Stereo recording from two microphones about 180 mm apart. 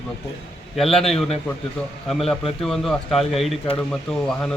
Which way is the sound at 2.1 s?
Centre (ahead or behind).